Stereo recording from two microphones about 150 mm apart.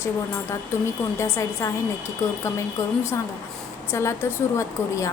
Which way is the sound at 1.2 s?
20° left (ahead or behind).